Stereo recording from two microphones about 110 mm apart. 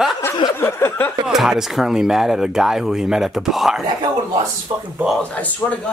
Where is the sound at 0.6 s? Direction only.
20° left (ahead or behind).